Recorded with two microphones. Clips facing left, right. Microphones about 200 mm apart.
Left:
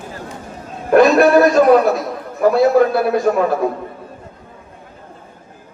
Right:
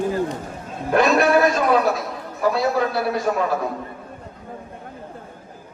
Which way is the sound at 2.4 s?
50° left (ahead or behind).